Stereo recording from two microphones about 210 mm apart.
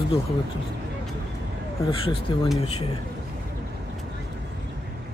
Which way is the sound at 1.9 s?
25° left (ahead or behind).